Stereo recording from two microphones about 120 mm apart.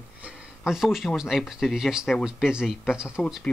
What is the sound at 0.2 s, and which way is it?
Speech, 5° right (ahead or behind).